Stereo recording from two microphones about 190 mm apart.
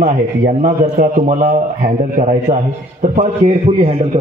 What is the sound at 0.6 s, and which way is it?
A man's voice, 40° right (ahead or behind).